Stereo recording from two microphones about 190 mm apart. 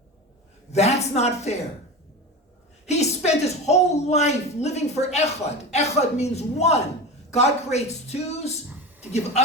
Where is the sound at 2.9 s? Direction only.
35° left (ahead or behind).